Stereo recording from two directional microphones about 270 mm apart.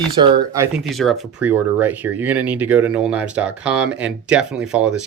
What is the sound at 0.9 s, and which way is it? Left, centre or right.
Speech, centre.